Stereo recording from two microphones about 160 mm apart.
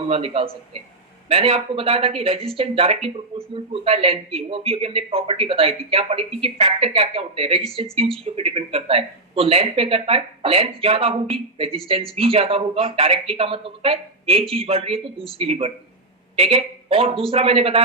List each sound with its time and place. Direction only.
0.1 s speech: 35° right (ahead or behind)